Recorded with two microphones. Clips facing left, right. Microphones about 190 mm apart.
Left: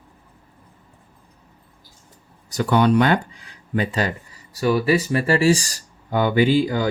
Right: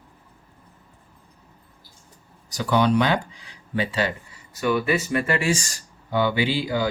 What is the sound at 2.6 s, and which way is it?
Speech, 55° left (ahead or behind).